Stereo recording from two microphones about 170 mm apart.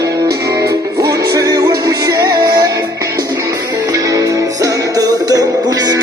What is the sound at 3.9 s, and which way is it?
Music, 20° right (ahead or behind).